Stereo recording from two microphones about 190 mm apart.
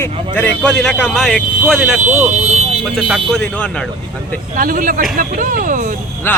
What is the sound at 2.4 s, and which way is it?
Vehicle, 35° right (ahead or behind).